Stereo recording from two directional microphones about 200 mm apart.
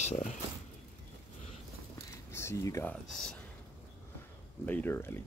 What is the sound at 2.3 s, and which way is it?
Speech, 15° left (ahead or behind).